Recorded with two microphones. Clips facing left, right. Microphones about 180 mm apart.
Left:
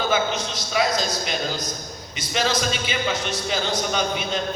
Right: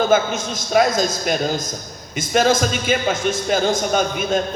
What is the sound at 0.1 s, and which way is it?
A man's voice, 50° right (ahead or behind).